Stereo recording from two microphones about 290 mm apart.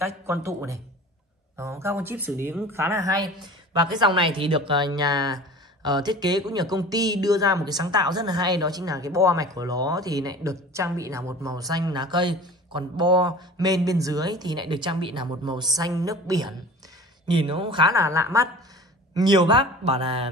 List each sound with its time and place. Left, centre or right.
0.0 s speech: centre